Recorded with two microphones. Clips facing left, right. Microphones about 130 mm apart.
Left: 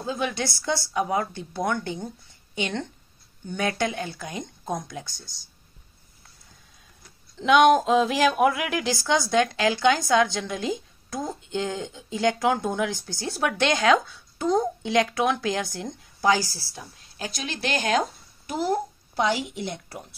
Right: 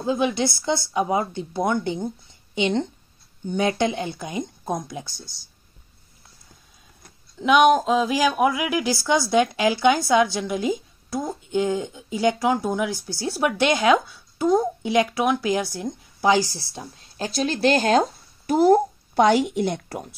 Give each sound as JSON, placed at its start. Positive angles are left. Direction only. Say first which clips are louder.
{"t": 0.0, "sound": "a woman's voice", "louder": "right 6 dB", "side_deg": -20}
{"t": 7.3, "sound": "a woman's voice", "louder": "right 1 dB", "side_deg": -5}
{"t": 16.3, "sound": "speech", "louder": "right 3 dB", "side_deg": -20}
{"t": 18.5, "sound": "speech", "louder": "right 9 dB", "side_deg": -45}